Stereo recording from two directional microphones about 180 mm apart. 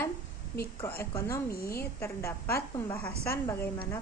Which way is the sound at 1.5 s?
55° left (ahead or behind).